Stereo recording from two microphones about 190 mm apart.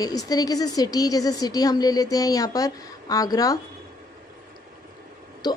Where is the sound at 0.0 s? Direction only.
20° left (ahead or behind).